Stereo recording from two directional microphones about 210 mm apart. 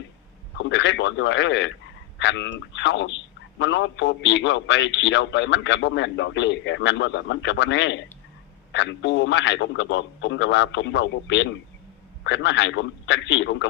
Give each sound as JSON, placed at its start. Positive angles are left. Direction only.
{"t": 0.6, "sound": "a man's voice", "side_deg": 60}